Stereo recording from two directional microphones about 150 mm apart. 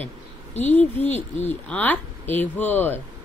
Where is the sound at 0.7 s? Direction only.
10° left (ahead or behind).